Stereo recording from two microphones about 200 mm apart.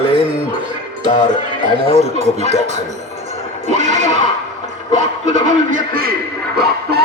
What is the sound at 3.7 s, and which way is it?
Neigh, 35° right (ahead or behind).